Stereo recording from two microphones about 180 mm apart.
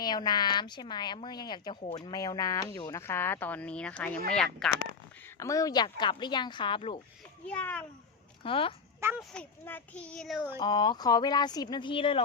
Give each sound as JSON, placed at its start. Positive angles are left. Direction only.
{"t": 0.0, "sound": "a woman's voice", "side_deg": 20}
{"t": 3.0, "sound": "speech", "side_deg": 10}
{"t": 5.4, "sound": "a woman's voice", "side_deg": 20}
{"t": 7.4, "sound": "speech", "side_deg": 10}
{"t": 8.4, "sound": "a woman's voice", "side_deg": 30}
{"t": 9.0, "sound": "a child's voice", "side_deg": -10}
{"t": 9.3, "sound": "speech", "side_deg": 10}
{"t": 10.6, "sound": "a woman's voice", "side_deg": 25}